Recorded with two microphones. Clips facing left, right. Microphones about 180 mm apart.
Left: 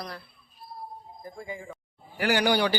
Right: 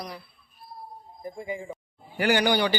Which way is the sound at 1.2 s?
20° right (ahead or behind).